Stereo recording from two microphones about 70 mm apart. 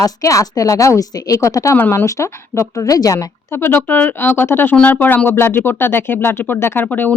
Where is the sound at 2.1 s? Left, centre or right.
Left.